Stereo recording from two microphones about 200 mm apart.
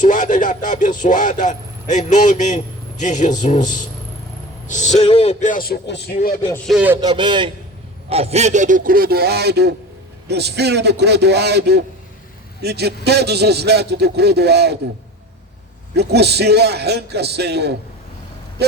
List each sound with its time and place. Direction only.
0.0 s speech: 40° left (ahead or behind)
6.7 s speech: 5° right (ahead or behind)
7.0 s a man's voice: 20° right (ahead or behind); by 14.8 s 55° right (ahead or behind)
16.0 s a man's voice: 55° right (ahead or behind)